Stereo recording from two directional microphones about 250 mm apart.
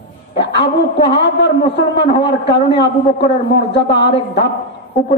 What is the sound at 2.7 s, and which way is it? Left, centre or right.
Speech, left.